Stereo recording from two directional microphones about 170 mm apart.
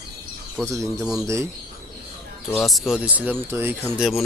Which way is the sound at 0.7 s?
20° right (ahead or behind).